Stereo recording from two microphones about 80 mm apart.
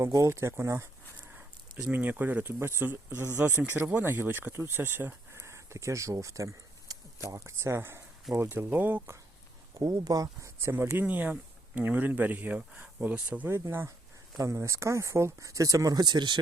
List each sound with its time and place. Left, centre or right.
0.0 s speech: right
1.4 s a sound: centre
1.9 s speech: right
9.7 s speech: right
10.6 s speech: right
13.5 s speech: right